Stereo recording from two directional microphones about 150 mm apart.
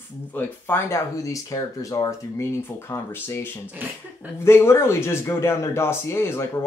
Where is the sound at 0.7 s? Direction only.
15° left (ahead or behind).